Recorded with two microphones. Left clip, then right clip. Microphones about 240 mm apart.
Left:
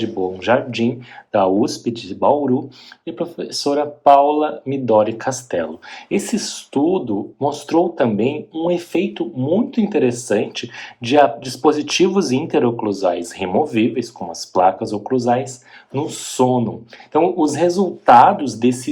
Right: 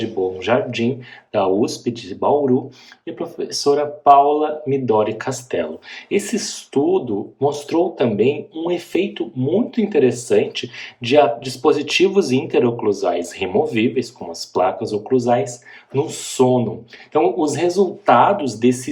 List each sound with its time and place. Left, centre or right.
0.4 s speech: centre